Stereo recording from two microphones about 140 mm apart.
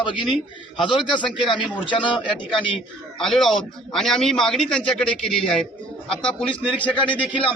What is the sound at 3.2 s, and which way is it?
A man's voice, centre (ahead or behind).